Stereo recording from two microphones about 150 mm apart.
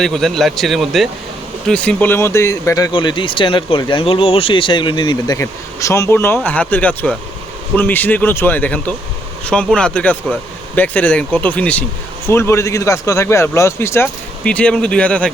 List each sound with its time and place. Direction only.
0.0 s speech: 5° left (ahead or behind)